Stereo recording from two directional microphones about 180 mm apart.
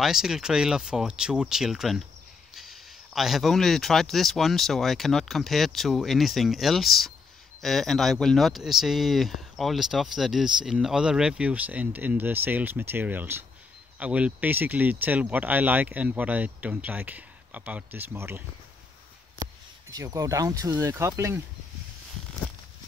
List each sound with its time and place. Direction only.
0.0 s speech: 5° right (ahead or behind)
19.9 s speech: 20° right (ahead or behind)